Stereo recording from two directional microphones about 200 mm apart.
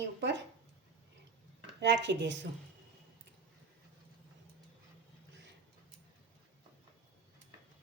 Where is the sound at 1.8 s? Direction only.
60° right (ahead or behind).